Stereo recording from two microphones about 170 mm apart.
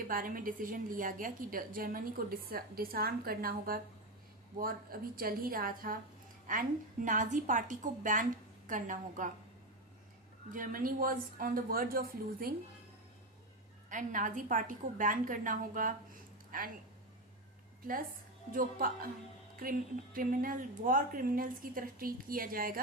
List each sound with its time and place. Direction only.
0.0 s a woman's voice: 55° right (ahead or behind)
10.5 s a woman's voice: 55° right (ahead or behind)
13.9 s a woman's voice: 50° right (ahead or behind)
18.5 s a woman's voice: 55° right (ahead or behind)